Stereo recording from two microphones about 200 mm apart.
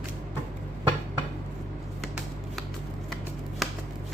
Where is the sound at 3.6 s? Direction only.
Centre (ahead or behind).